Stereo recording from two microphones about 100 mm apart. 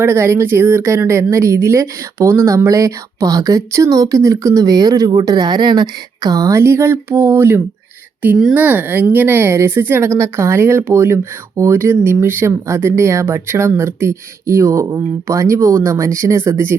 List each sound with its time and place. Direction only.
0.0 s speech: 25° right (ahead or behind)